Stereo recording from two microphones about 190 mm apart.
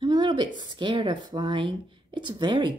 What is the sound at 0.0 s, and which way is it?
A woman's voice, 25° right (ahead or behind).